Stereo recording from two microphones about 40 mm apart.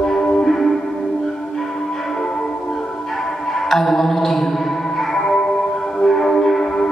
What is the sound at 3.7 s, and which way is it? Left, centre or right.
Music, centre.